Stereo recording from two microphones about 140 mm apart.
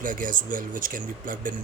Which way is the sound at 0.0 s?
75° right (ahead or behind).